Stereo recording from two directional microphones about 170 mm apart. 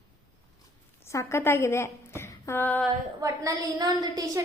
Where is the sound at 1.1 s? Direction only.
15° left (ahead or behind).